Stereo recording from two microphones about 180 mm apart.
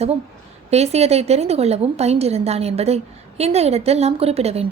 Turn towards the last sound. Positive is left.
turn(degrees=-35)  # may be behind; listen again after turning